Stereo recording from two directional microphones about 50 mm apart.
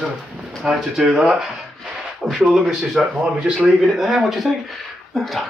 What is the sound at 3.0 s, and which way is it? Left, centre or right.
Speech, centre.